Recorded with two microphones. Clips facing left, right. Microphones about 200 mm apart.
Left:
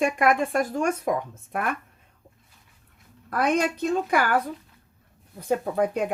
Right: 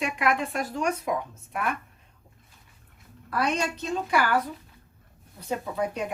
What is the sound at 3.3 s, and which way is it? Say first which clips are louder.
Speech: left 4 dB; 55° left (ahead or behind).